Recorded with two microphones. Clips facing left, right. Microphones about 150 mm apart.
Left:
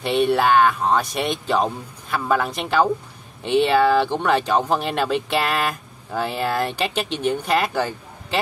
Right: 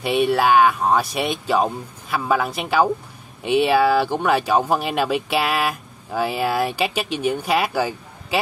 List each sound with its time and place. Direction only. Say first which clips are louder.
0.0 s speech: even; 5° right (ahead or behind)